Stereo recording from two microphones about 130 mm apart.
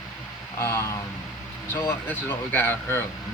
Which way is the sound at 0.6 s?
20° left (ahead or behind).